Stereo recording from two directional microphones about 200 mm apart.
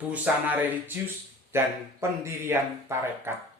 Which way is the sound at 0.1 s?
10° right (ahead or behind).